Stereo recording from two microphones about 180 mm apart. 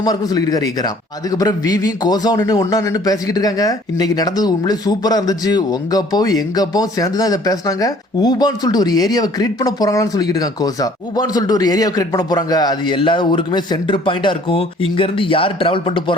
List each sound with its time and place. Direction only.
0.0 s a man's voice: 20° left (ahead or behind)